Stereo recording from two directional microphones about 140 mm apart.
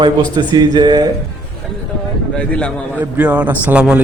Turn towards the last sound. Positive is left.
turn(degrees=-10)  # may be behind; listen again after turning